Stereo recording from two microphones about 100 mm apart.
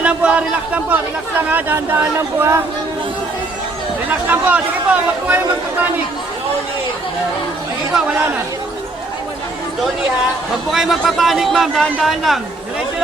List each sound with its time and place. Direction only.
0.0 s a man's voice: 10° right (ahead or behind)
4.3 s a man's voice: 15° right (ahead or behind)
7.9 s a man's voice: 15° right (ahead or behind)
10.7 s a man's voice: 5° right (ahead or behind)